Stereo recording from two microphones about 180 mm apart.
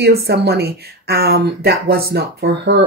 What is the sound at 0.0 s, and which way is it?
Speech, 60° right (ahead or behind).